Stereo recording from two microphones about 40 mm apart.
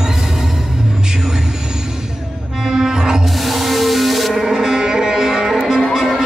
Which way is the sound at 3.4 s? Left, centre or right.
Centre.